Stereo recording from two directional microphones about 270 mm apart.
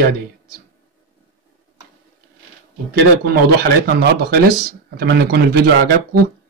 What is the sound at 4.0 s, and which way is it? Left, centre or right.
Speech, right.